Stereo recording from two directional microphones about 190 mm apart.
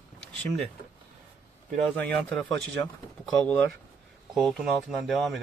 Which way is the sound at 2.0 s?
10° left (ahead or behind).